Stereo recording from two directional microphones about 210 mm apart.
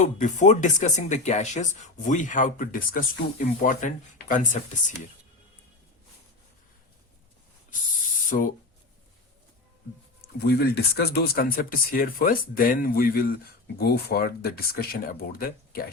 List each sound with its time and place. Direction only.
0.0 s speech: 35° left (ahead or behind)
8.3 s speech: 40° left (ahead or behind)
10.4 s speech: 50° left (ahead or behind)